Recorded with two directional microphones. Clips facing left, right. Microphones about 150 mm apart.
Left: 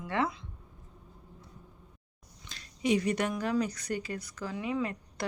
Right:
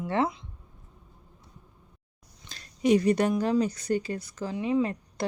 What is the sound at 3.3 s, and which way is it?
Speech, 30° right (ahead or behind).